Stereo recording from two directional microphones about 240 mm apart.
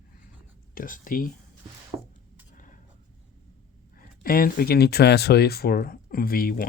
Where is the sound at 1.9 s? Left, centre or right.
Centre.